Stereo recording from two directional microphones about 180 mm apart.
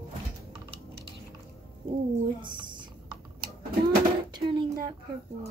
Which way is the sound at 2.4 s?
25° right (ahead or behind).